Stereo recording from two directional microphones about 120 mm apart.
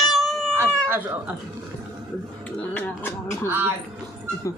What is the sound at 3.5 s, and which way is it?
Speech, 15° right (ahead or behind).